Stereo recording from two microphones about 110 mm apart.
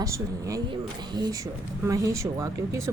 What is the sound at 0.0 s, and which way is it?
Speech, 30° right (ahead or behind).